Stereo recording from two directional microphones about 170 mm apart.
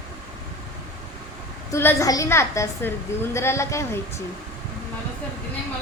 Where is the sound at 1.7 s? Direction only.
15° left (ahead or behind).